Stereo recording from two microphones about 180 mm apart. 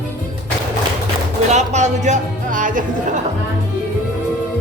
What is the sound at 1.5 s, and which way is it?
Music, 40° right (ahead or behind).